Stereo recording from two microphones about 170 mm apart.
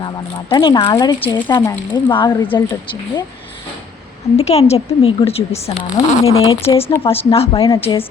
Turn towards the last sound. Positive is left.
turn(degrees=20)  # may be behind; listen again after turning